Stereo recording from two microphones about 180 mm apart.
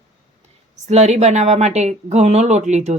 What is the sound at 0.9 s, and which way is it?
Speech, 40° right (ahead or behind).